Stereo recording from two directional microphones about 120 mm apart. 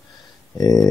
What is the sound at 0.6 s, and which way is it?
Speech, 30° left (ahead or behind).